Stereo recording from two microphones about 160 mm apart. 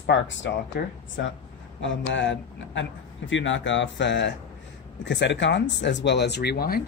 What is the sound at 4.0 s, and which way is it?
Speech, 90° left.